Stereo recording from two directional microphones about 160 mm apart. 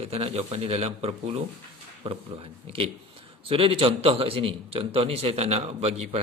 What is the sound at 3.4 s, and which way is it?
A man's voice, 35° right (ahead or behind).